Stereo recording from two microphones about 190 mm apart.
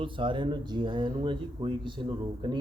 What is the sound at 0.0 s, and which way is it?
Speech, 25° right (ahead or behind).